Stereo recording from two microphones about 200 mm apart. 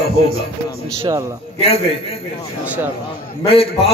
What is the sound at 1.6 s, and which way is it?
Speech, 30° left (ahead or behind).